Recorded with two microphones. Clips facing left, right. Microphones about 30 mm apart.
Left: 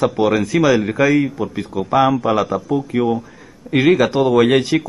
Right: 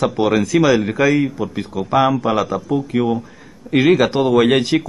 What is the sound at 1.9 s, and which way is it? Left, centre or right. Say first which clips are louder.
Speech: left 1 dB; right.